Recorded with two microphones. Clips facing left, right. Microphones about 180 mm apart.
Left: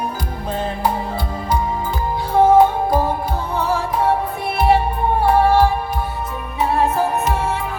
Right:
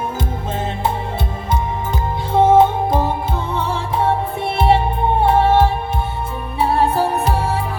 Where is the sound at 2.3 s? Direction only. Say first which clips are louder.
Even; 25° right (ahead or behind).